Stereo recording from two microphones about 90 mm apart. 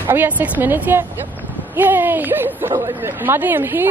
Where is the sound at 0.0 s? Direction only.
20° right (ahead or behind).